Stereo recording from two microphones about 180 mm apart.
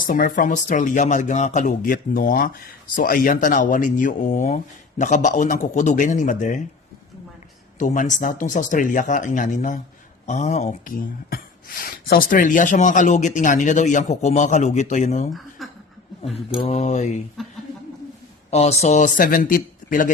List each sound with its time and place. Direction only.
0.0 s speech: 50° left (ahead or behind)
7.8 s speech: 45° left (ahead or behind)
15.3 s a sound: centre (ahead or behind)
16.3 s mantra: 35° left (ahead or behind)
17.4 s speech: centre (ahead or behind)
18.5 s speech: 35° left (ahead or behind)